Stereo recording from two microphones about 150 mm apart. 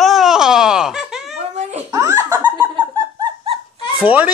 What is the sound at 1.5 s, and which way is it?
Babbling, 50° right (ahead or behind).